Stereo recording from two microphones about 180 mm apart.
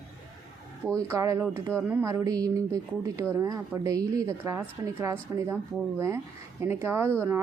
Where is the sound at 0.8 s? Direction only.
20° right (ahead or behind).